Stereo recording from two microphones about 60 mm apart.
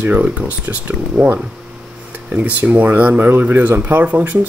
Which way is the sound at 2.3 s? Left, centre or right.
Right.